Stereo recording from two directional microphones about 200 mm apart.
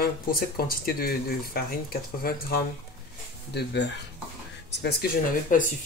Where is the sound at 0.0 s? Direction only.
50° left (ahead or behind).